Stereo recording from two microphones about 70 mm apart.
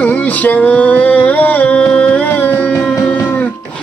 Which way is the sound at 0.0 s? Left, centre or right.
Left.